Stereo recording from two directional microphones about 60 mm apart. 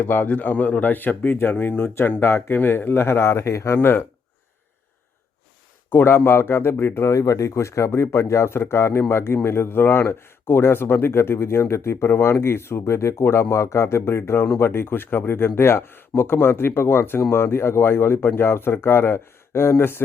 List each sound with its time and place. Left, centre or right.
0.0 s speech: left
3.8 s speech: left
5.9 s speech: left
7.1 s a man's voice: left